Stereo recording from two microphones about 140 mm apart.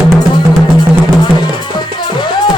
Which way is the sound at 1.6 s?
35° left (ahead or behind).